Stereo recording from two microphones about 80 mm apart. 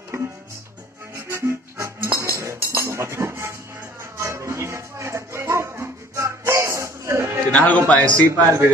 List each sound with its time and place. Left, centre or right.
0.1 s music: right
7.5 s a man's voice: centre
8.3 s a man's voice: right